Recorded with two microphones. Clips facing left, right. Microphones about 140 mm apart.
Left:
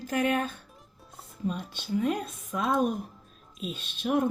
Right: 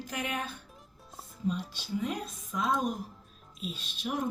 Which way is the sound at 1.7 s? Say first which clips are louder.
Left 6 dB; 55° left (ahead or behind).